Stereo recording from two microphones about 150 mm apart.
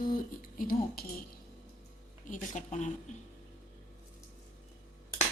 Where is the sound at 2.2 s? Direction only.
55° left (ahead or behind).